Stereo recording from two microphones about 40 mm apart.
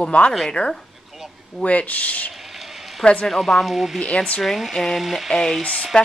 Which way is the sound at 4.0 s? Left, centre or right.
Left.